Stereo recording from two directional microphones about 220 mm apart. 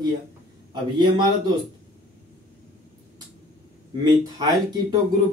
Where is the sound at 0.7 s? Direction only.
20° right (ahead or behind).